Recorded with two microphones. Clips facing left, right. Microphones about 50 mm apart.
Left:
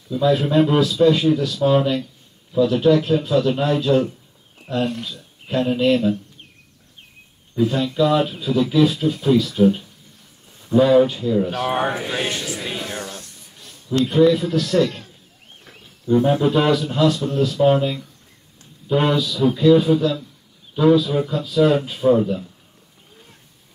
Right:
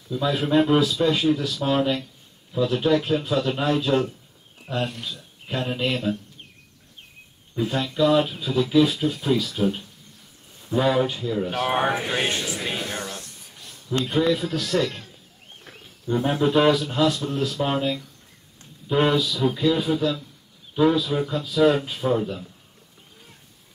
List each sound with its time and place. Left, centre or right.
0.1 s speech: centre
7.5 s speech: centre
11.6 s speech: right
12.0 s speech: centre
12.3 s speech: right
12.5 s speech: centre
12.9 s a sound: centre
14.0 s speech: centre
16.1 s speech: centre